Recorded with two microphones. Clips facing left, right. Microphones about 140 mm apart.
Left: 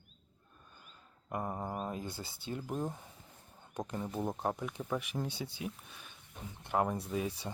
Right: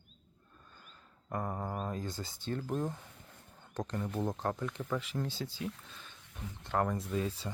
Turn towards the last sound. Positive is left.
turn(degrees=15)  # may be behind; listen again after turning